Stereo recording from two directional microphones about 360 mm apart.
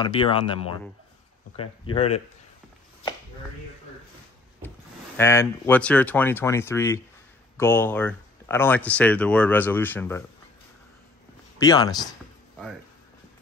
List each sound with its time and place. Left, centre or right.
0.0 s speech: centre
4.6 s speech: centre
11.5 s speech: centre